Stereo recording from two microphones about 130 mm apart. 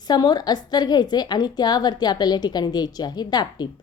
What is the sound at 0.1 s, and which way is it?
A woman's voice, 30° left (ahead or behind).